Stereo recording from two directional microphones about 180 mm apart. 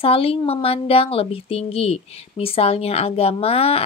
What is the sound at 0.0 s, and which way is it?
A woman's voice, 30° left (ahead or behind).